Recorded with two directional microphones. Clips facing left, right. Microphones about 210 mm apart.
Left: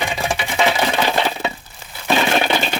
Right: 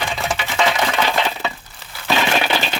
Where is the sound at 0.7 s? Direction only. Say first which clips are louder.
Left 1 dB; 25° left (ahead or behind).